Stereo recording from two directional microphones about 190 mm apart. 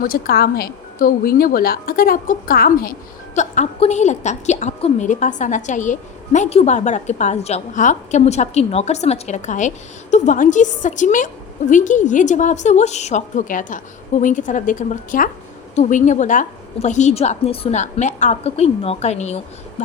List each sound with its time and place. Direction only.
0.0 s a woman's voice: 55° left (ahead or behind)
3.3 s a woman's voice: 40° left (ahead or behind)